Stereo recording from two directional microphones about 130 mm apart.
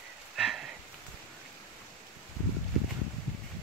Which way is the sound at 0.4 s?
Centre (ahead or behind).